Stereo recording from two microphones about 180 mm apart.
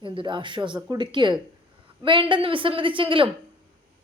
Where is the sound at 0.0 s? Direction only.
30° right (ahead or behind).